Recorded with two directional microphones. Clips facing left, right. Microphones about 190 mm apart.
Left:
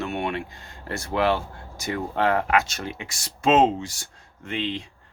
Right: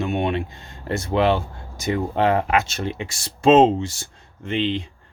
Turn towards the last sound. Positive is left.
turn(degrees=-25)  # may be behind; listen again after turning